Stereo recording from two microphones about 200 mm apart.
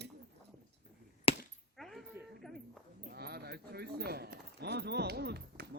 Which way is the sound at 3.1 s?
50° right (ahead or behind).